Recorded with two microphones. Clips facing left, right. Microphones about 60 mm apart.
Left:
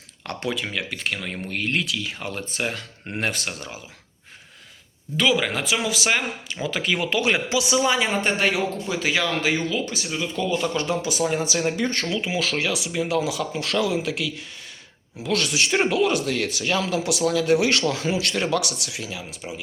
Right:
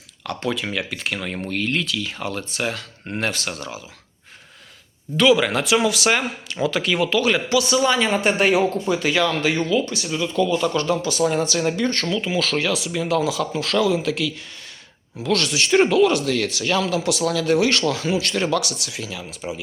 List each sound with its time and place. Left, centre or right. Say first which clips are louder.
0.4 s speech: right 2 dB; centre
5.1 s speech: right 5 dB; centre
7.0 s speech: right 3 dB; left; by 8.2 s centre
8.2 s speech: right 5 dB; centre
8.7 s speech: right 4 dB; centre
18.3 s speech: right 2 dB; centre
19.4 s speech: right 6 dB; centre